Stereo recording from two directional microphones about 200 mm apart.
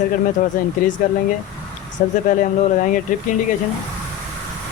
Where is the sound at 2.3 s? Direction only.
40° left (ahead or behind).